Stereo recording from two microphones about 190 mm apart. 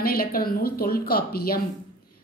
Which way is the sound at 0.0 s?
50° left (ahead or behind).